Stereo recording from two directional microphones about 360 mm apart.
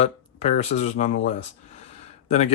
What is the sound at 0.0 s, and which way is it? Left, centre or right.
Speech, centre.